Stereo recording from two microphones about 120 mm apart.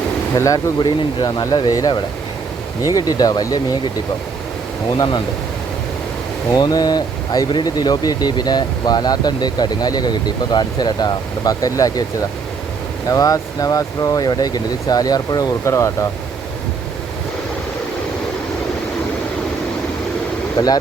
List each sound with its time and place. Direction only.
0.3 s speech: 30° left (ahead or behind)
6.5 s speech: 30° left (ahead or behind)
13.1 s speech: 30° left (ahead or behind)
20.6 s speech: 35° left (ahead or behind)